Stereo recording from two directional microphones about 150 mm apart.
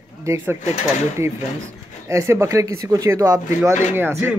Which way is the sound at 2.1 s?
20° right (ahead or behind).